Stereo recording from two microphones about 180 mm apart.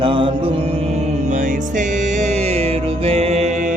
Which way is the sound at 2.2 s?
35° right (ahead or behind).